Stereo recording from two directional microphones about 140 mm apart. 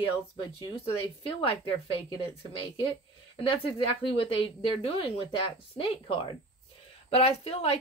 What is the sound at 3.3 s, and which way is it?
Speech, 40° left (ahead or behind).